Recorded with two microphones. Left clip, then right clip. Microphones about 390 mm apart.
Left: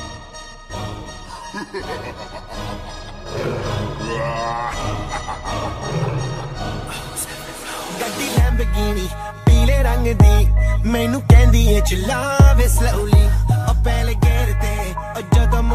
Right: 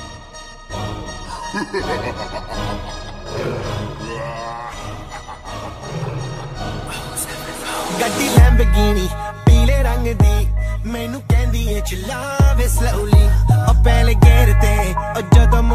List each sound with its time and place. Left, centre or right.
1.5 s speech: right
3.3 s music: centre
4.0 s grunt: left
5.9 s music: left
7.6 s music: right
9.4 s music: centre
9.8 s music: centre
10.1 s music: left
10.9 s music: left; by 13.0 s centre
13.0 s music: centre
13.5 s music: right